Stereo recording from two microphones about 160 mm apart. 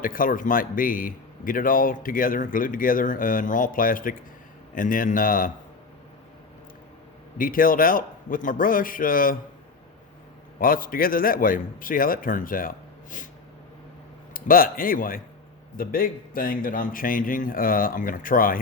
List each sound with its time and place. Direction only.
0.0 s a man's voice: 60° left (ahead or behind)
7.3 s a man's voice: 60° left (ahead or behind)
10.6 s a man's voice: 60° left (ahead or behind)
14.3 s a man's voice: 60° left (ahead or behind)